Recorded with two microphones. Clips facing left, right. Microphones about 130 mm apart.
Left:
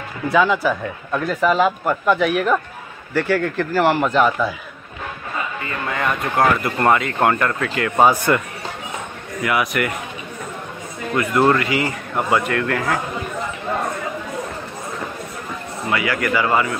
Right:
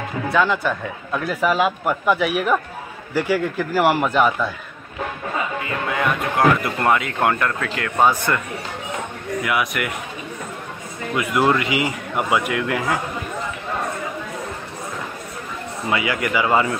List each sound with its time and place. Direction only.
0.3 s a man's voice: centre (ahead or behind)
5.6 s speech: 5° right (ahead or behind)
9.4 s speech: centre (ahead or behind)
11.1 s a man's voice: 10° right (ahead or behind)
15.9 s speech: 20° right (ahead or behind)